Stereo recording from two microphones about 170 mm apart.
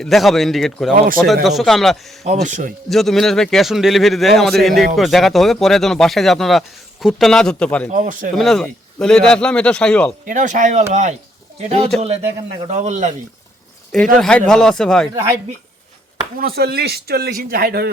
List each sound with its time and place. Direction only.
0.0 s speech: centre (ahead or behind)
2.2 s speech: 45° right (ahead or behind)
2.9 s speech: centre (ahead or behind)
7.9 s speech: 50° right (ahead or behind)
8.4 s speech: centre (ahead or behind)
10.2 s a man's voice: 50° right (ahead or behind)
13.9 s speech: 5° left (ahead or behind)
15.1 s speech: 15° right (ahead or behind)
16.4 s speech: 65° right (ahead or behind)